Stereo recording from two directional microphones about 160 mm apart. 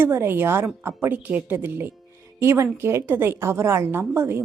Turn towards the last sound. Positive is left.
turn(degrees=-15)  # may be behind; listen again after turning